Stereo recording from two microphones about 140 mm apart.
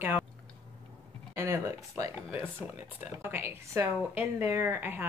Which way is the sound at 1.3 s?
15° right (ahead or behind).